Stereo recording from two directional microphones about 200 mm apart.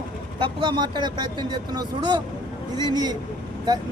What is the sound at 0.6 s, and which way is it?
Speech, 25° right (ahead or behind).